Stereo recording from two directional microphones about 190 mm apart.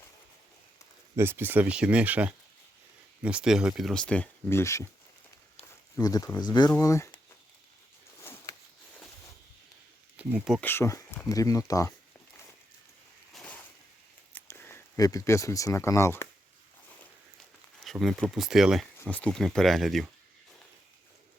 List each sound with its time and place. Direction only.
1.1 s speech: 10° right (ahead or behind); by 4.9 s 15° left (ahead or behind)
6.0 s speech: 20° left (ahead or behind)
8.2 s a sound: 10° left (ahead or behind)
10.2 s speech: 5° right (ahead or behind)
10.6 s speech: 10° left (ahead or behind)
13.3 s a sound: 5° left (ahead or behind)
14.3 s speech: 10° left (ahead or behind)
17.8 s speech: centre (ahead or behind)